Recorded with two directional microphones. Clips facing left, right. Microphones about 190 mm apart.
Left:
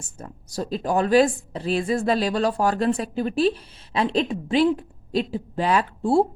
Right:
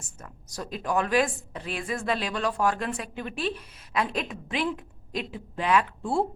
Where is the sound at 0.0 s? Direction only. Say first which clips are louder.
Left 7 dB; 30° left (ahead or behind).